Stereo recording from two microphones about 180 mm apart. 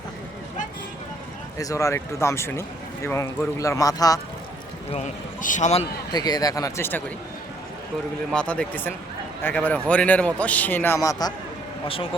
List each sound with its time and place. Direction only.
1.5 s speech: 15° left (ahead or behind)
4.9 s speech: 40° left (ahead or behind)
6.1 s speech: 20° left (ahead or behind)
8.3 s speech: 5° left (ahead or behind)